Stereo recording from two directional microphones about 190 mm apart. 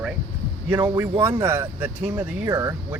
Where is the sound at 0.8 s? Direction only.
15° right (ahead or behind).